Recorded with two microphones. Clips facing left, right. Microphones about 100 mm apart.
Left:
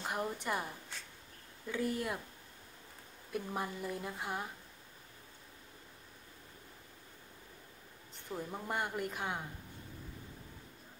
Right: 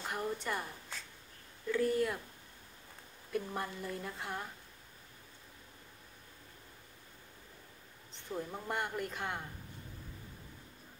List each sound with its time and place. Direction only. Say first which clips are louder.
0.1 s a sound: even; 15° left (ahead or behind)
1.7 s speech: right 4 dB; 15° left (ahead or behind)
3.3 s speech: right 1 dB; 15° left (ahead or behind)
8.1 s speech: right 1 dB; 10° left (ahead or behind)